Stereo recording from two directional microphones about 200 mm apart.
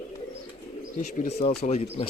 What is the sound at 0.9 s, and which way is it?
Speech, 40° left (ahead or behind).